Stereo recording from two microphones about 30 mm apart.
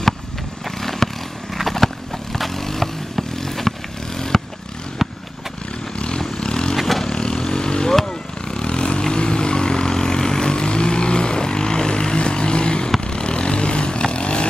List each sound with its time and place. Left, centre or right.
0.7 s vehicle: centre
1.6 s horse: centre
2.3 s vehicle: centre
5.0 s vehicle: centre
6.3 s vehicle: left
6.8 s vehicle: centre
7.1 s vehicle: left
7.9 s vehicle: centre
8.5 s vehicle: left